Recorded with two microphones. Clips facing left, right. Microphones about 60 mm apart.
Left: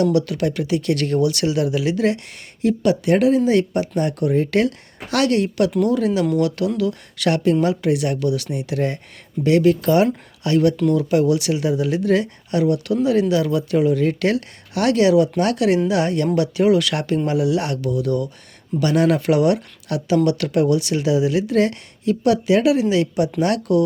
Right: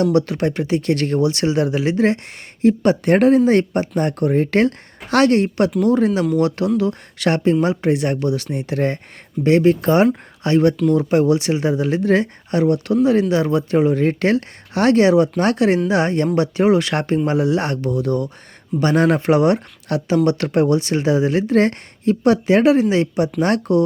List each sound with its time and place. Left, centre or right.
0.0 s speech: right
6.7 s speech: right